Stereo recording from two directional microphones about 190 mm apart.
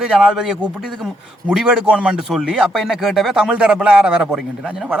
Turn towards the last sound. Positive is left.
turn(degrees=-5)  # may be behind; listen again after turning